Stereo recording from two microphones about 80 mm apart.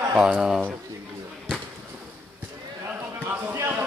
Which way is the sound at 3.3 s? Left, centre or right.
Right.